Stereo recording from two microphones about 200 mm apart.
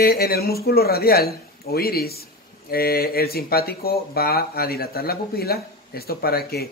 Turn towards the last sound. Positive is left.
turn(degrees=50)  # may be behind; listen again after turning